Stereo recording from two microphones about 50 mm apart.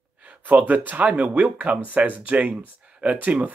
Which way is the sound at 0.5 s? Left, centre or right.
Right.